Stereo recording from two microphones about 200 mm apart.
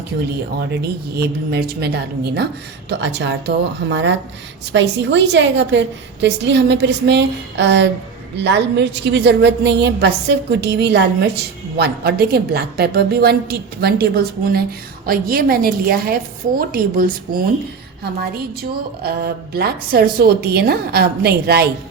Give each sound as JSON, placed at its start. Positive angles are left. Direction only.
{"t": 0.7, "sound": "a woman's voice", "side_deg": -55}